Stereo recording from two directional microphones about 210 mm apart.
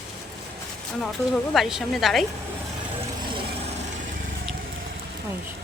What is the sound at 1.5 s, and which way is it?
Speech, centre (ahead or behind).